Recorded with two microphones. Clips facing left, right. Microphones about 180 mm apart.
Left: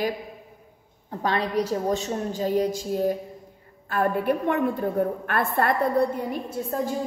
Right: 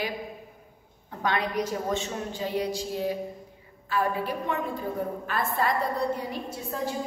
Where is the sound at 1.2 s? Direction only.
35° left (ahead or behind); by 5.7 s 60° left (ahead or behind).